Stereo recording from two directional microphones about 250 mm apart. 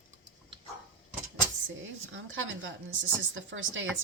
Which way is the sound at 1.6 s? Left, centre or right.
Right.